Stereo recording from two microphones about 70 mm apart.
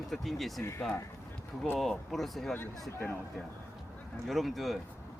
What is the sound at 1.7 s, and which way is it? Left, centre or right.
Speech, centre.